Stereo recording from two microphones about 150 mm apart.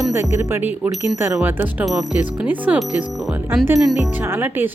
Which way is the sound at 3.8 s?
Centre (ahead or behind).